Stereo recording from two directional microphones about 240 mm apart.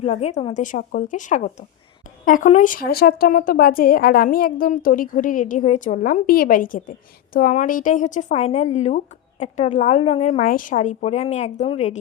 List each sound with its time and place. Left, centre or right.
0.0 s a woman's voice: left